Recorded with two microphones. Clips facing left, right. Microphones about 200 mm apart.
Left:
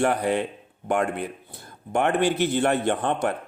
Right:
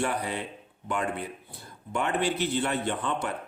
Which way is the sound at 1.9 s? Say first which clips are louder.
Left 6 dB; 65° left (ahead or behind).